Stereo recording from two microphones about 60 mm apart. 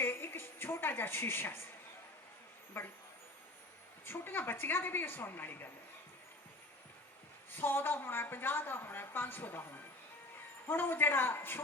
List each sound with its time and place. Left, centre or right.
0.0 s a sound: left
2.8 s a woman's voice: left
4.0 s a woman's voice: left
7.5 s a woman's voice: left